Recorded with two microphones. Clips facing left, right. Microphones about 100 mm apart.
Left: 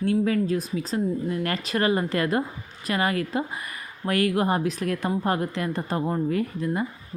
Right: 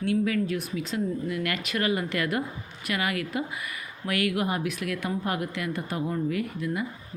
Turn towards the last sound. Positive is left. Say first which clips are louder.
# left 3 dB
turn(degrees=35)  # may be behind; listen again after turning